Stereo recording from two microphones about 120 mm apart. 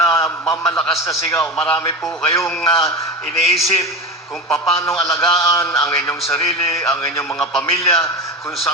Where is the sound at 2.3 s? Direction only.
25° left (ahead or behind).